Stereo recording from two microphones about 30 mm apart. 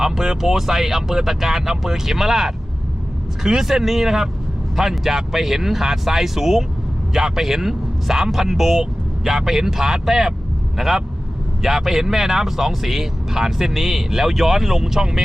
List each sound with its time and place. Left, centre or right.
0.0 s speech: centre